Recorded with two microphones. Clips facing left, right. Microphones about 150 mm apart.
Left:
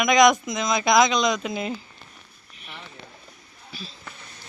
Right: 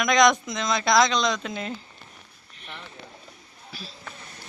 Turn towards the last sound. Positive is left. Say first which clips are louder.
# left 1 dB
turn(degrees=0)  # may be behind; listen again after turning